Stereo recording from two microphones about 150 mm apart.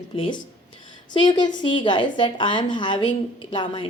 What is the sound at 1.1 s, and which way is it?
Speech, 30° left (ahead or behind).